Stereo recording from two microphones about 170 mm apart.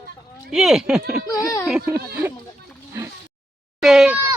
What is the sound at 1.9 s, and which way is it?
Speech, 10° right (ahead or behind).